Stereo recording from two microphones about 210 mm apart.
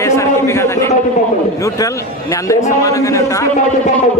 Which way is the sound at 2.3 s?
15° left (ahead or behind).